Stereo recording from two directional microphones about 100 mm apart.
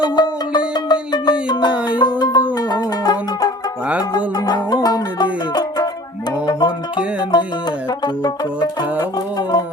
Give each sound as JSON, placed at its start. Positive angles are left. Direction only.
{"t": 0.0, "sound": "music", "side_deg": 45}